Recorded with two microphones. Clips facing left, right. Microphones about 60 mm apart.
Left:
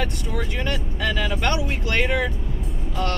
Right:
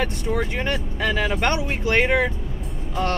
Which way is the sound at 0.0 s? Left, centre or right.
Right.